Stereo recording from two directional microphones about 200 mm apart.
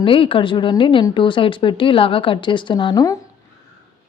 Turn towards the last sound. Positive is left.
turn(degrees=15)  # may be behind; listen again after turning